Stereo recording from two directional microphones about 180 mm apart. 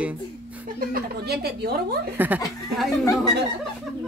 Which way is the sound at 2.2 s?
10° right (ahead or behind).